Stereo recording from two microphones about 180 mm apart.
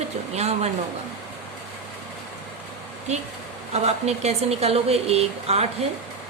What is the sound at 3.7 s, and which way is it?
Speech, 35° right (ahead or behind).